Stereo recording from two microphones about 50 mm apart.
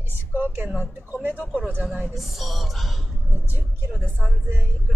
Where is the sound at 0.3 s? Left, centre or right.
Right.